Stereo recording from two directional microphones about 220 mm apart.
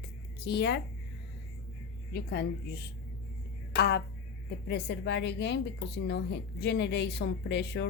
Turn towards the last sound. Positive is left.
turn(degrees=50)  # may be behind; listen again after turning